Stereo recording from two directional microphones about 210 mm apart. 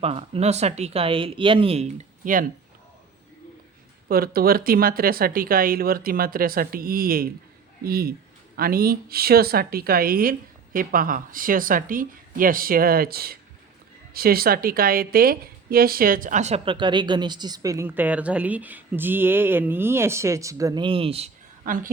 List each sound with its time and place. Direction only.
0.0 s a woman's voice: 25° right (ahead or behind)
4.1 s a woman's voice: 45° right (ahead or behind); by 21.2 s 25° right (ahead or behind)
21.6 s a woman's voice: 40° right (ahead or behind)